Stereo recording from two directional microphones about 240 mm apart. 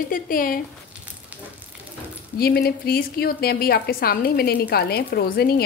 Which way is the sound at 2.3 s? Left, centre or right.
Left.